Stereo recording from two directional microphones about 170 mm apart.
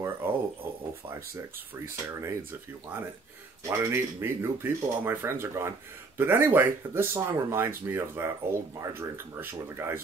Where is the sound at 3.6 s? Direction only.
15° right (ahead or behind).